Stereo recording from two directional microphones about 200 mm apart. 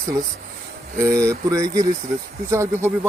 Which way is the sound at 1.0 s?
15° right (ahead or behind).